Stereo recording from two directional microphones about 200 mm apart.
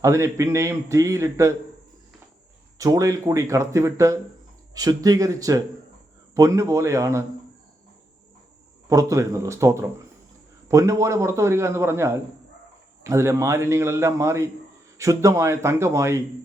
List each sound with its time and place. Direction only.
0.0 s a man's voice: 15° right (ahead or behind)
2.7 s a man's voice: 15° right (ahead or behind)
8.9 s a man's voice: 15° right (ahead or behind)